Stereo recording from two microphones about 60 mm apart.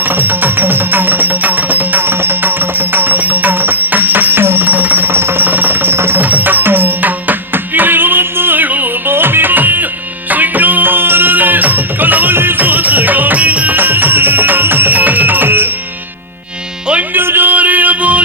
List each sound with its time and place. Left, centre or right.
0.0 s music: right
17.2 s music: right